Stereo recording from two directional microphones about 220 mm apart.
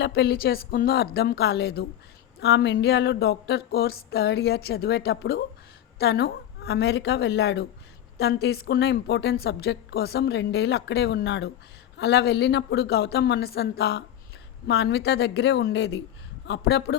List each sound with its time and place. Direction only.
0.0 s a woman's voice: 45° left (ahead or behind)